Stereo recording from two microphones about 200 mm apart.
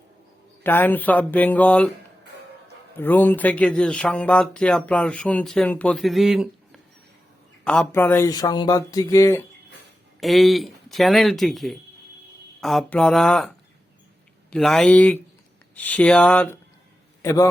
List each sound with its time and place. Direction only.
0.6 s speech: 10° left (ahead or behind)
3.0 s speech: 10° left (ahead or behind)
7.6 s speech: 5° left (ahead or behind)
10.2 s speech: centre (ahead or behind)
14.5 s speech: centre (ahead or behind)
17.2 s speech: 15° left (ahead or behind)